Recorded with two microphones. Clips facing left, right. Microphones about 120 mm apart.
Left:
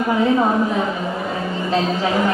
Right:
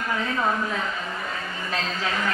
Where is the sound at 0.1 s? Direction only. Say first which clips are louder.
Left 9 dB; 20° left (ahead or behind).